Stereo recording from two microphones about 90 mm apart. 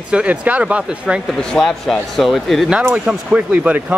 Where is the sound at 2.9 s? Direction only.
10° right (ahead or behind).